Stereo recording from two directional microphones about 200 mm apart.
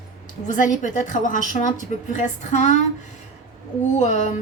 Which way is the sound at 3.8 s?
35° left (ahead or behind).